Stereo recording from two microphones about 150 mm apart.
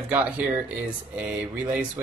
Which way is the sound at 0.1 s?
5° right (ahead or behind).